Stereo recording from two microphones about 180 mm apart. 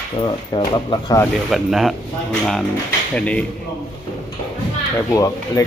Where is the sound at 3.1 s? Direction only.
5° left (ahead or behind).